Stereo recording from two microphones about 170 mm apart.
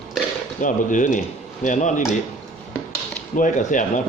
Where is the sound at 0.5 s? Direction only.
50° left (ahead or behind).